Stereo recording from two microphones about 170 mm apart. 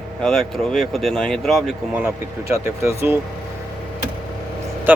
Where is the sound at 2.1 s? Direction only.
15° right (ahead or behind).